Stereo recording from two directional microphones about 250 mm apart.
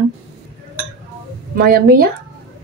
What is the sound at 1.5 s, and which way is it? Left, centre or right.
Speech, right.